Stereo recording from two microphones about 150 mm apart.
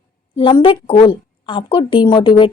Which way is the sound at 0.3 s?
35° left (ahead or behind).